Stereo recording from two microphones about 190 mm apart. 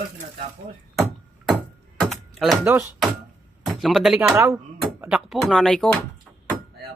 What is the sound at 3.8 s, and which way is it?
Speech, centre (ahead or behind).